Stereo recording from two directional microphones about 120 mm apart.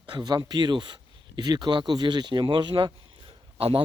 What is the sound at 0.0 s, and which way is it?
Speech, 35° right (ahead or behind).